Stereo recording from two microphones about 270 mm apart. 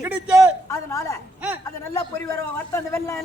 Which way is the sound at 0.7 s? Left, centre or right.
Centre.